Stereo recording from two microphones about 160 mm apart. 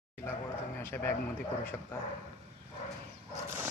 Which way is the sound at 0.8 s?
15° left (ahead or behind).